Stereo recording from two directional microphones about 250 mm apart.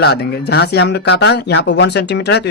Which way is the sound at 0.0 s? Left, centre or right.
Left.